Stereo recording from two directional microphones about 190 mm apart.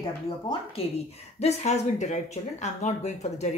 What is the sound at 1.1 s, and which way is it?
Speech, 35° left (ahead or behind).